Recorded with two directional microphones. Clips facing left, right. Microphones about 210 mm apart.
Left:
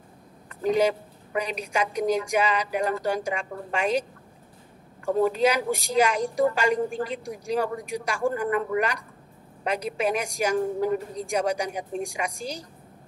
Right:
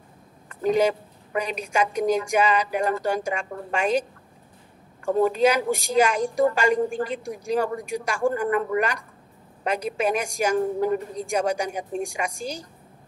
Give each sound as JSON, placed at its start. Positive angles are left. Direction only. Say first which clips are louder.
{"t": 0.7, "sound": "a woman's voice", "louder": "even", "side_deg": -50}
{"t": 5.4, "sound": "a woman's voice", "louder": "right 2 dB", "side_deg": -50}